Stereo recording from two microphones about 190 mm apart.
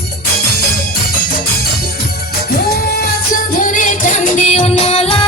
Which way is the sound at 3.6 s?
45° left (ahead or behind).